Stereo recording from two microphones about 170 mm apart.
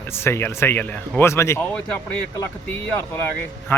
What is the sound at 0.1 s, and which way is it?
Speech, 15° left (ahead or behind).